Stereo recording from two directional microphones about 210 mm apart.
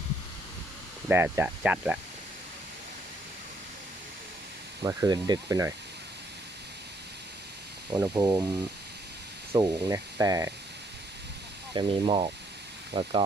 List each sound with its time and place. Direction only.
1.0 s speech: 10° right (ahead or behind)
4.8 s speech: 15° right (ahead or behind)
7.9 s speech: 15° right (ahead or behind)
9.5 s speech: 20° right (ahead or behind)
11.7 s speech: 25° right (ahead or behind)